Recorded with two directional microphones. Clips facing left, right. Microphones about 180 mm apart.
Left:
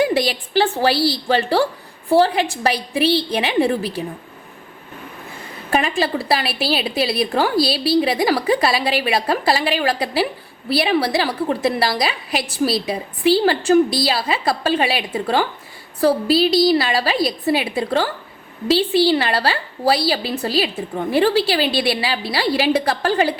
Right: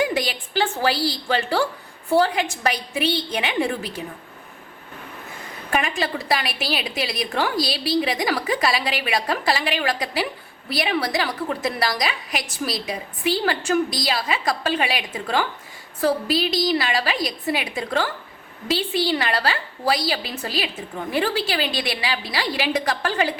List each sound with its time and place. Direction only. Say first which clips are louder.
0.0 s a woman's voice: left 5 dB; 35° left (ahead or behind)
5.7 s a woman's voice: left 5 dB; 35° left (ahead or behind)